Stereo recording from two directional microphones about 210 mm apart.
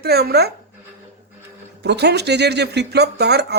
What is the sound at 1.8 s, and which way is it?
Speech, 55° right (ahead or behind).